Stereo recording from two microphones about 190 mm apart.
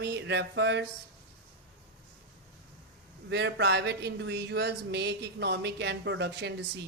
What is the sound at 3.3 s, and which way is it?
Speech, 60° right (ahead or behind).